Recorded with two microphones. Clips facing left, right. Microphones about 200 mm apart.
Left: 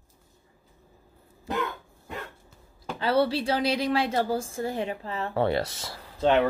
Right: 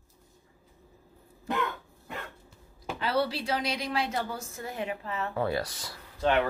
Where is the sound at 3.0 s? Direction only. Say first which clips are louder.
Left 5 dB; 30° left (ahead or behind).